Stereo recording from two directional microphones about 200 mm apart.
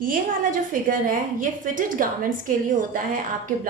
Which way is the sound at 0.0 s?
45° right (ahead or behind).